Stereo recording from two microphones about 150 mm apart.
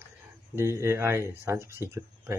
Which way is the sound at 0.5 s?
20° right (ahead or behind).